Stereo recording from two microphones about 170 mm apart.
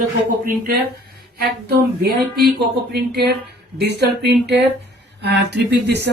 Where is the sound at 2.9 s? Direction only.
75° right (ahead or behind).